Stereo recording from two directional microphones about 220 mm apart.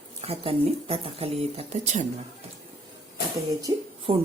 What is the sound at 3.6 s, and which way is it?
Speech, 25° right (ahead or behind).